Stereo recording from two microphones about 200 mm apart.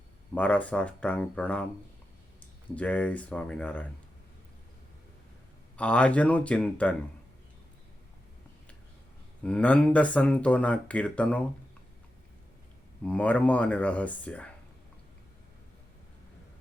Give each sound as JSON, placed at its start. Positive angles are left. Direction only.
{"t": 0.3, "sound": "speech", "side_deg": 5}
{"t": 2.7, "sound": "speech", "side_deg": 5}
{"t": 5.7, "sound": "speech", "side_deg": 5}
{"t": 9.4, "sound": "speech", "side_deg": 5}
{"t": 13.1, "sound": "speech", "side_deg": 5}